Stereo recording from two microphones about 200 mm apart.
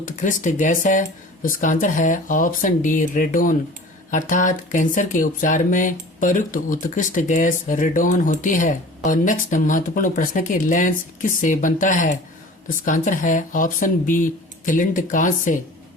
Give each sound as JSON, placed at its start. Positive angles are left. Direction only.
{"t": 0.0, "sound": "speech", "side_deg": 40}